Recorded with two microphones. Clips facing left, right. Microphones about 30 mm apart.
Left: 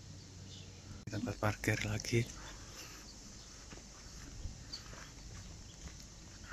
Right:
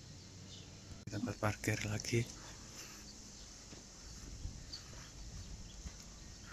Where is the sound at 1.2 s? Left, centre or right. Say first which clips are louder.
Left 2 dB; centre.